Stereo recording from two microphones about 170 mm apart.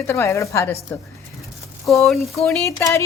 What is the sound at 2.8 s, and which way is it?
Speech, 15° left (ahead or behind).